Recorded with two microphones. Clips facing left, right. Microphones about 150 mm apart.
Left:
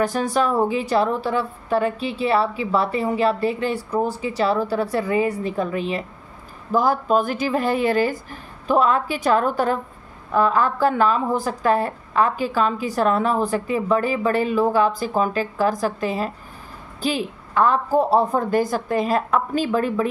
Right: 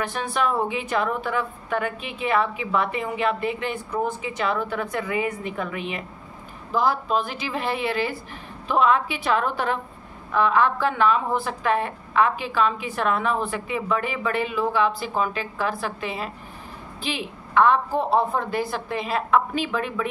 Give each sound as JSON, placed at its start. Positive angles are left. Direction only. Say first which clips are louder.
{"t": 0.0, "sound": "a woman's voice", "louder": "left 5 dB", "side_deg": 40}
{"t": 6.7, "sound": "a woman's voice", "louder": "left 4 dB", "side_deg": 45}